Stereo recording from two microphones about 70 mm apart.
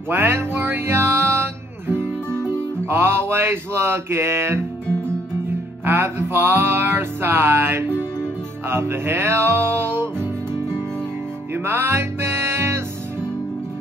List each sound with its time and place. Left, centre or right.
0.1 s music: right
5.9 s music: right
11.5 s music: right